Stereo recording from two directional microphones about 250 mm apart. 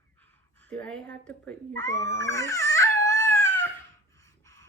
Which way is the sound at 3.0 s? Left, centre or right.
Right.